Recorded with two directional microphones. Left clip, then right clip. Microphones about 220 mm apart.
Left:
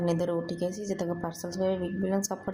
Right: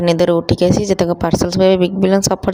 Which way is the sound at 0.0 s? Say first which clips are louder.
Right 15 dB; 40° right (ahead or behind).